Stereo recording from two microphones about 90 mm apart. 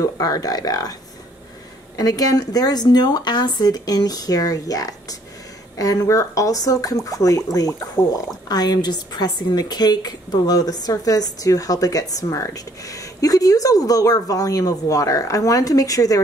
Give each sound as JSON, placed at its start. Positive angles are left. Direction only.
{"t": 0.0, "sound": "speech", "side_deg": 45}
{"t": 2.0, "sound": "a woman's voice", "side_deg": 45}